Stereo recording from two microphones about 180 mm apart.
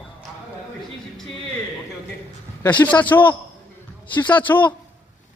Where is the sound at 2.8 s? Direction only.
10° left (ahead or behind).